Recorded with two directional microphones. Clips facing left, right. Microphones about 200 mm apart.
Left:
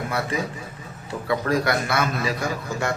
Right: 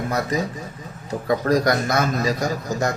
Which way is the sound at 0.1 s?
40° right (ahead or behind).